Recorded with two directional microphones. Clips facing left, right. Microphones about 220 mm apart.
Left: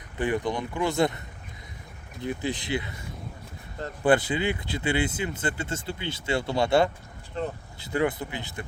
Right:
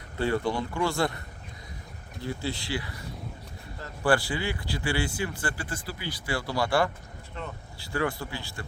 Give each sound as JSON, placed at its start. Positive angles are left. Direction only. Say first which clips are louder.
{"t": 0.2, "sound": "speech", "louder": "even", "side_deg": 15}
{"t": 2.2, "sound": "speech", "louder": "left 3 dB", "side_deg": 20}
{"t": 7.4, "sound": "speech", "louder": "left 8 dB", "side_deg": 35}
{"t": 7.8, "sound": "speech", "louder": "left 3 dB", "side_deg": 20}